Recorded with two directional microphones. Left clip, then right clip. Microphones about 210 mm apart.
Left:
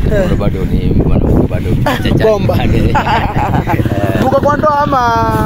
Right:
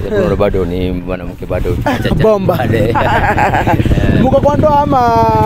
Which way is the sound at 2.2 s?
50° right (ahead or behind).